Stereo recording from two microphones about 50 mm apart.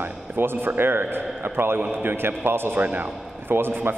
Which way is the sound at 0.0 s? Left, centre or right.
Right.